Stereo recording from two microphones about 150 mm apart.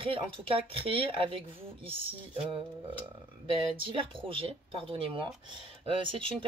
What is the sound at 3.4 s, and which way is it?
Speech, 35° right (ahead or behind).